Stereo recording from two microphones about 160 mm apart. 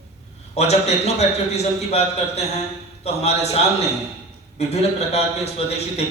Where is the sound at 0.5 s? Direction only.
40° left (ahead or behind).